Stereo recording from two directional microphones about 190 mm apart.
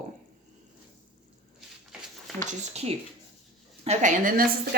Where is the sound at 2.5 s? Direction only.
35° right (ahead or behind); by 4.8 s 50° right (ahead or behind).